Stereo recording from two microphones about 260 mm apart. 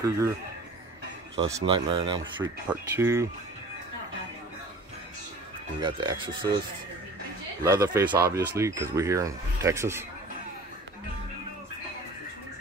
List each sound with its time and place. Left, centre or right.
1.3 s speech: centre
5.8 s speech: centre
7.6 s speech: centre